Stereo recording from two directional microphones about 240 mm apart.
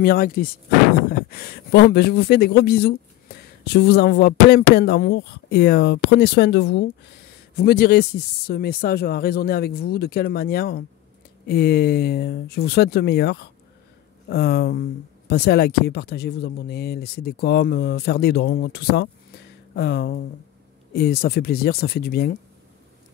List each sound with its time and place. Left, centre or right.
0.0 s speech: left